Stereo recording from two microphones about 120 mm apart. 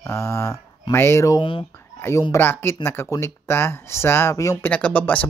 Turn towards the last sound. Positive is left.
turn(degrees=15)  # may be behind; listen again after turning